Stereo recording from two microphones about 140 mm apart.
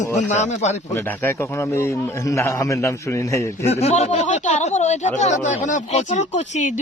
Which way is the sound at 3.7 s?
50° left (ahead or behind).